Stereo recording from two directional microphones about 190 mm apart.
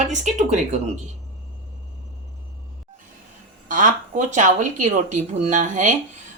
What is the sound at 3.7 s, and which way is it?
Speech, 45° right (ahead or behind).